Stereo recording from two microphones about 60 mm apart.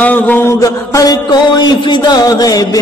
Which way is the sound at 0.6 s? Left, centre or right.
Left.